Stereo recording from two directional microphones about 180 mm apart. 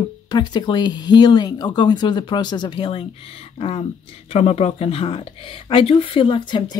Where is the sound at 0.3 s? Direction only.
25° left (ahead or behind).